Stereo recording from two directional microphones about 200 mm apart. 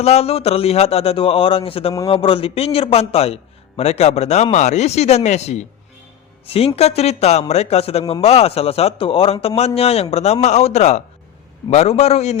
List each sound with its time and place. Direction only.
0.0 s a man's voice: 30° left (ahead or behind)